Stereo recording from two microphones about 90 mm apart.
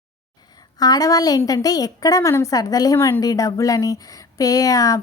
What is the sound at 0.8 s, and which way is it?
A woman's voice, 45° left (ahead or behind).